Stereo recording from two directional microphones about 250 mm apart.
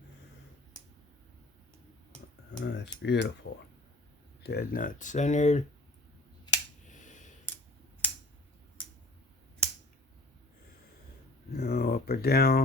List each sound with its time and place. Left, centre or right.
2.5 s cutlery: left
4.4 s speech: left
6.9 s a sound: left
11.5 s speech: left